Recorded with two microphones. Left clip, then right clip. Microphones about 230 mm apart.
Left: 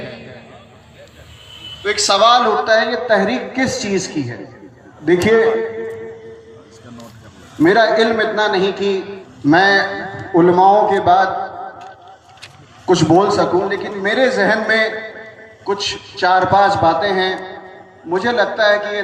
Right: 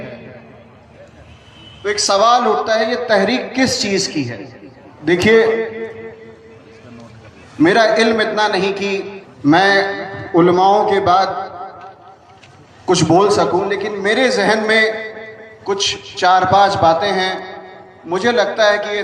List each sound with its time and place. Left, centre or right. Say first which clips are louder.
1.8 s a man's voice: left 1 dB; right
7.6 s a man's voice: even; right
12.8 s a man's voice: even; right